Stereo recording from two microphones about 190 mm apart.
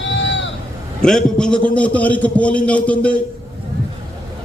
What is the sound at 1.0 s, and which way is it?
A man's voice, 5° left (ahead or behind).